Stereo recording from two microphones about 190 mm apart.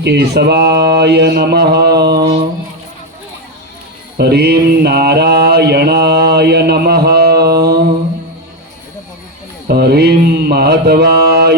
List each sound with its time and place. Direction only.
0.0 s a sound: 60° right (ahead or behind)
4.2 s mantra: 55° right (ahead or behind)
9.6 s mantra: 55° right (ahead or behind)